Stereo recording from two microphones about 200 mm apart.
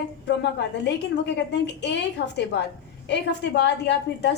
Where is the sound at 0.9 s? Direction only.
60° left (ahead or behind).